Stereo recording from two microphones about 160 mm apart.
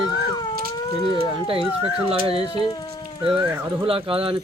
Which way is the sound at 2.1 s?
35° right (ahead or behind).